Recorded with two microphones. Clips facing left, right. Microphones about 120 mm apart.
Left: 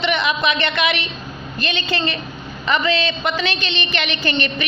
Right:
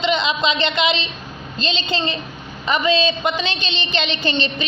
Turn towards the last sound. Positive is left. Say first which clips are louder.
# even
turn(degrees=-20)  # may be behind; listen again after turning